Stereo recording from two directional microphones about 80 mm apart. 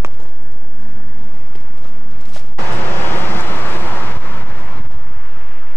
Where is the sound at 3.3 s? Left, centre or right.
Left.